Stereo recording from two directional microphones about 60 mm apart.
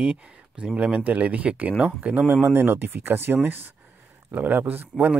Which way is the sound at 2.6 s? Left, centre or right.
Right.